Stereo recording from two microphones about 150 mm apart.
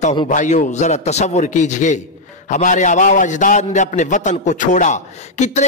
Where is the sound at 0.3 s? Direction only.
60° left (ahead or behind).